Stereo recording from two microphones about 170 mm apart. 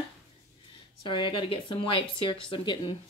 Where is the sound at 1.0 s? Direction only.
30° left (ahead or behind).